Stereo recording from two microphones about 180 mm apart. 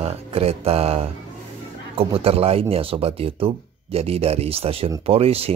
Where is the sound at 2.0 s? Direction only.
30° right (ahead or behind).